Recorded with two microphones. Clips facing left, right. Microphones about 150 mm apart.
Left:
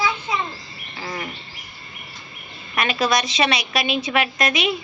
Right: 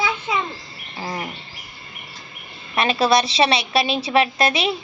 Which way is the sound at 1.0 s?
25° right (ahead or behind).